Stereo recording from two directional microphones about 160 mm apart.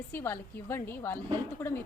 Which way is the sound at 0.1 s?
15° left (ahead or behind).